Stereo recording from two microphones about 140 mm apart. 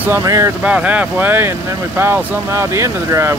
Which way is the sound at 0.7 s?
10° right (ahead or behind).